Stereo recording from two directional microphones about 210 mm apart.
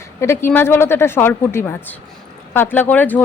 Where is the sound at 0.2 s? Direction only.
10° left (ahead or behind).